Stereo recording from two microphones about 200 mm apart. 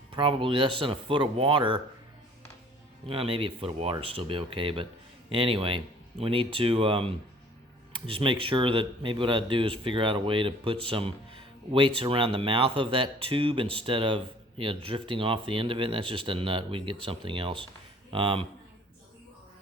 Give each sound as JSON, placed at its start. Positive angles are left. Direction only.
{"t": 0.1, "sound": "speech", "side_deg": -25}
{"t": 3.1, "sound": "speech", "side_deg": -25}